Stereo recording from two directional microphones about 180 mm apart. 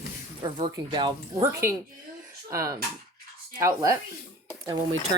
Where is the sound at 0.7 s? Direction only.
25° right (ahead or behind).